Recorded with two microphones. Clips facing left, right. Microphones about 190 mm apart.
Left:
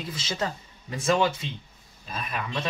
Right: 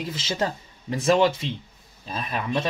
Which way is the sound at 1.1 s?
25° right (ahead or behind).